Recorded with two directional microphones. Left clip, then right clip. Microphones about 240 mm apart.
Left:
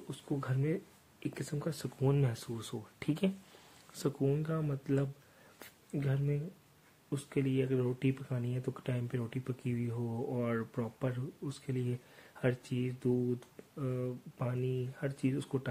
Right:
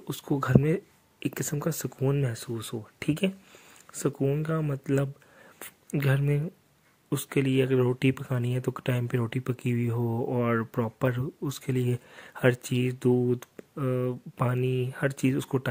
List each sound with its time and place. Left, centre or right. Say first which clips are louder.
0.1 s speech: right 13 dB; right
2.0 s speech: right 2 dB; centre; by 5.1 s right
5.6 s a sound: right 8 dB; right
7.1 s speech: right 8 dB; right